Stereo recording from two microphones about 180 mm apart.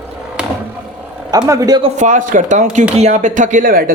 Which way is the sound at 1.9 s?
45° right (ahead or behind).